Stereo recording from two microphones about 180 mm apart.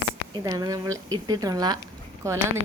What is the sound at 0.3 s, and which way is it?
A woman's voice, 20° right (ahead or behind).